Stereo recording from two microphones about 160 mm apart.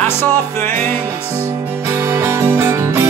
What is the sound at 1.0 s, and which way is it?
Music, 15° right (ahead or behind).